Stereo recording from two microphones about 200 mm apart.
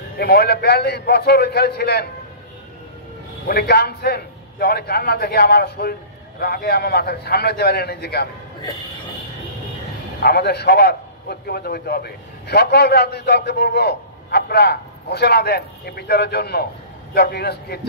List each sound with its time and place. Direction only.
0.2 s a man's voice: 55° left (ahead or behind)
3.4 s a man's voice: 55° left (ahead or behind)
10.2 s a man's voice: 55° left (ahead or behind)